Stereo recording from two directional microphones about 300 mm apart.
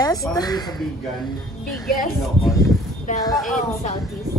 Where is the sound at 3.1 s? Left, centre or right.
Left.